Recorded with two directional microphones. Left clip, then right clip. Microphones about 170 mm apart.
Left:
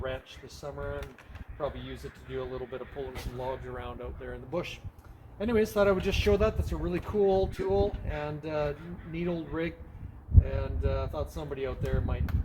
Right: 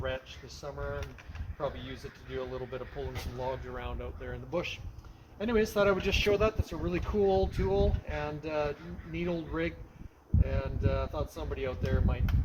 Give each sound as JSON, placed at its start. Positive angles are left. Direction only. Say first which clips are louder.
{"t": 0.6, "sound": "a man's voice", "louder": "left 1 dB", "side_deg": -5}